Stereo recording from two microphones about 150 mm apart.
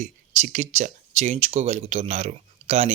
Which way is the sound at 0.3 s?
50° right (ahead or behind).